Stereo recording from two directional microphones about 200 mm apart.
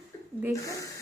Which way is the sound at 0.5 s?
15° left (ahead or behind).